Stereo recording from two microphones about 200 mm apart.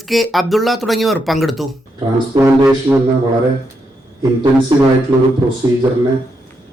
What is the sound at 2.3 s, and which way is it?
Speech, 15° right (ahead or behind).